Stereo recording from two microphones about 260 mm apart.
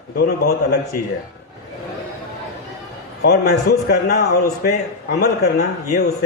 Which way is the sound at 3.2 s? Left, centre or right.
Left.